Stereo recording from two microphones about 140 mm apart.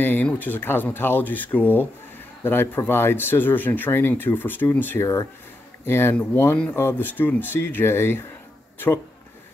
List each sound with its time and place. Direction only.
0.0 s speech: 15° left (ahead or behind)